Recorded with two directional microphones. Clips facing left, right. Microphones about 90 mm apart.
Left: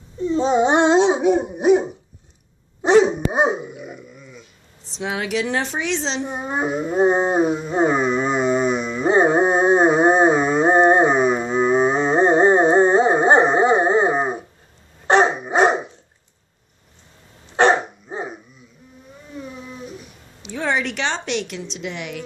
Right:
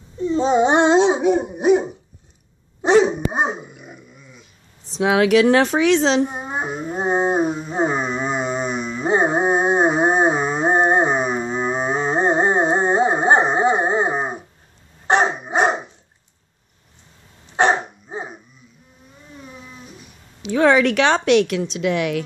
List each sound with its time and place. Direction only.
0.3 s babbling: 10° right (ahead or behind)
1.2 s laughter: 15° left (ahead or behind)
2.8 s dog: 5° left (ahead or behind)
5.0 s a woman's voice: 70° right (ahead or behind)
6.2 s a sound: 5° right (ahead or behind)
15.0 s dog: 5° right (ahead or behind)
17.6 s dog: 5° right (ahead or behind)
20.5 s a woman's voice: 60° right (ahead or behind)